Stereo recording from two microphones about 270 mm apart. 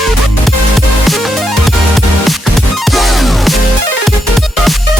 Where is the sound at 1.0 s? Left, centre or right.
Centre.